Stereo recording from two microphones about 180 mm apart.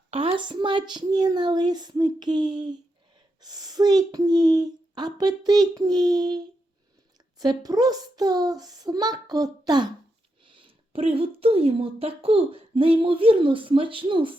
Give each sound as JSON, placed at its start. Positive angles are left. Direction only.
{"t": 0.1, "sound": "a child's voice", "side_deg": -30}